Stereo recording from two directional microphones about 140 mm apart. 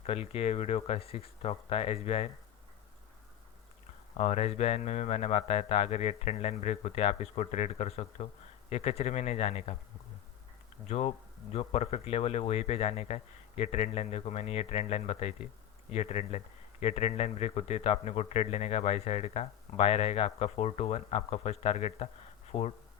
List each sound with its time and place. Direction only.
0.0 s speech: 45° left (ahead or behind)
4.2 s speech: 55° left (ahead or behind)
10.8 s speech: 50° left (ahead or behind)
22.5 s speech: 35° left (ahead or behind)